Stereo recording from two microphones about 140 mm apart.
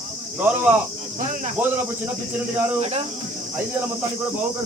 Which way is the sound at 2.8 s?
45° right (ahead or behind).